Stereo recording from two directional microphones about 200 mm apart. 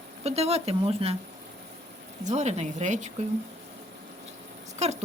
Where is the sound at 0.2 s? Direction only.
30° right (ahead or behind).